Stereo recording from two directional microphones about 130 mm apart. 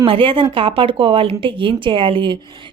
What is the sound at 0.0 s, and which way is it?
Speech, 45° right (ahead or behind).